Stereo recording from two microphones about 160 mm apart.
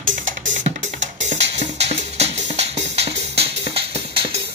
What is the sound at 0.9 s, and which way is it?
Music, 45° right (ahead or behind).